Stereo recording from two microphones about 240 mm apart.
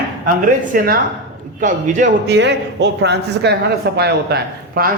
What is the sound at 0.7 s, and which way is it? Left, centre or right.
A man's voice, right.